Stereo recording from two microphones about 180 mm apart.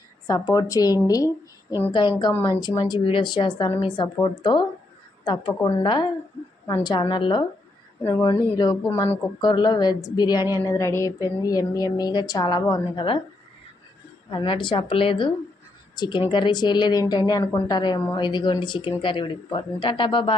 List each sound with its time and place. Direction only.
0.3 s a woman's voice: 20° left (ahead or behind)
9.4 s a woman's voice: 25° left (ahead or behind)
14.3 s a woman's voice: 25° left (ahead or behind)